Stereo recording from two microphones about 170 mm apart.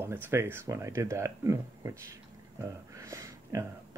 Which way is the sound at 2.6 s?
15° right (ahead or behind).